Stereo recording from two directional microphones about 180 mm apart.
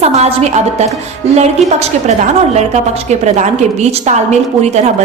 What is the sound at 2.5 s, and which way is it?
A woman's voice, 40° right (ahead or behind).